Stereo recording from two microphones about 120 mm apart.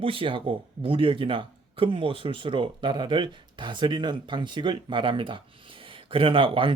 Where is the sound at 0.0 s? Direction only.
50° right (ahead or behind).